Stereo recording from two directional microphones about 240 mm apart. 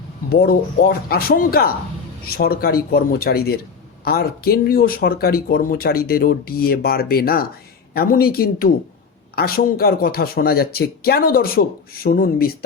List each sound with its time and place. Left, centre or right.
0.3 s speech: left